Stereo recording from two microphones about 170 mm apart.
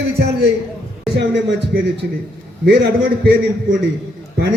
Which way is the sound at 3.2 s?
70° right (ahead or behind).